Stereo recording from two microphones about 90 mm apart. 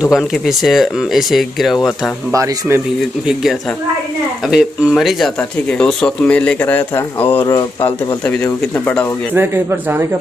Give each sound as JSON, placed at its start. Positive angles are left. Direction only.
{"t": 0.1, "sound": "speech", "side_deg": 0}
{"t": 2.3, "sound": "speech", "side_deg": -35}
{"t": 4.5, "sound": "speech", "side_deg": -5}
{"t": 5.7, "sound": "speech", "side_deg": 10}
{"t": 8.7, "sound": "speech", "side_deg": 20}
{"t": 9.3, "sound": "speech", "side_deg": -25}